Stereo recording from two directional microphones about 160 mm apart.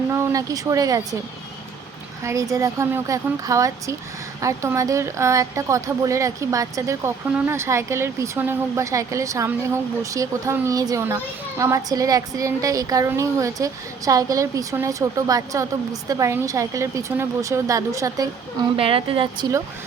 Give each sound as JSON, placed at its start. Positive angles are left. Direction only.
{"t": 0.1, "sound": "speech", "side_deg": -15}
{"t": 2.2, "sound": "speech", "side_deg": -20}
{"t": 18.8, "sound": "speech", "side_deg": -35}